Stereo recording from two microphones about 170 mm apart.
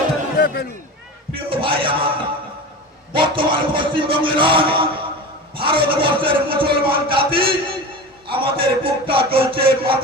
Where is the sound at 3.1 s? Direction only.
30° right (ahead or behind).